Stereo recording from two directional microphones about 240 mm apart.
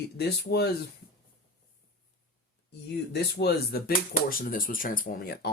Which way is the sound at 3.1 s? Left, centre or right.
Left.